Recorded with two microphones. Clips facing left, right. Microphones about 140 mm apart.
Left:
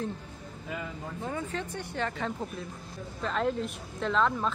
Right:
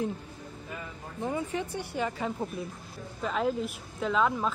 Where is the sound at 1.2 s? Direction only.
15° right (ahead or behind).